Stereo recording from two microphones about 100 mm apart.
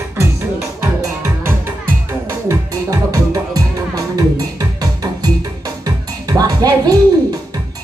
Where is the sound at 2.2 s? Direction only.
30° right (ahead or behind).